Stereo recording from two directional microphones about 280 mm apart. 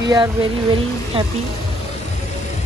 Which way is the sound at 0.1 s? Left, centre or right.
Centre.